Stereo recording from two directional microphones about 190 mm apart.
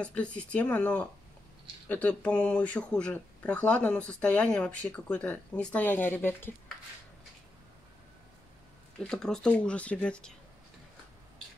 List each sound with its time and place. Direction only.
0.0 s speech: 5° left (ahead or behind)
9.0 s speech: 5° left (ahead or behind)